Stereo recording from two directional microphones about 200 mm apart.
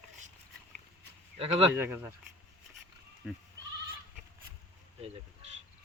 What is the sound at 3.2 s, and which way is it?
Speech, 5° right (ahead or behind).